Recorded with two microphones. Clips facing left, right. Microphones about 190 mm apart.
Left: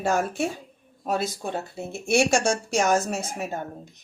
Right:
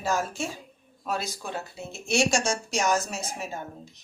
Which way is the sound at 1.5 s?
55° left (ahead or behind).